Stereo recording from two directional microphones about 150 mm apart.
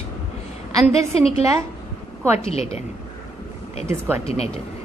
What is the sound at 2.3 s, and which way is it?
Speech, 40° left (ahead or behind).